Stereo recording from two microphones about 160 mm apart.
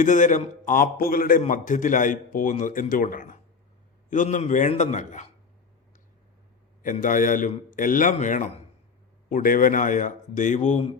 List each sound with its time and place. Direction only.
0.0 s a man's voice: 50° left (ahead or behind)
6.8 s a man's voice: 55° left (ahead or behind)